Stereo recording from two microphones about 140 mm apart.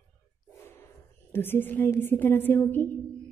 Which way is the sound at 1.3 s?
15° left (ahead or behind).